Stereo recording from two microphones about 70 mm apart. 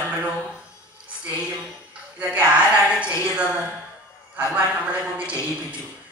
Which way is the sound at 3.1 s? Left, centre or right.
Left.